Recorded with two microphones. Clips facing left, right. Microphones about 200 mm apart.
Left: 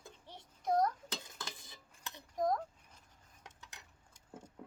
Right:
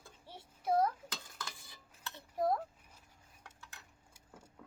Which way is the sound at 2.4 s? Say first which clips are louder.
Right 1 dB; 5° right (ahead or behind).